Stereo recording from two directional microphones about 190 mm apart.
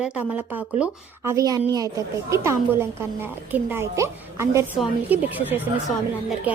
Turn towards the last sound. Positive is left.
turn(degrees=-5)  # may be behind; listen again after turning